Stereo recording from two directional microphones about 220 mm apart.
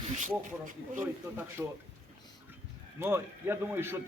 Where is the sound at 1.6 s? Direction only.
5° right (ahead or behind).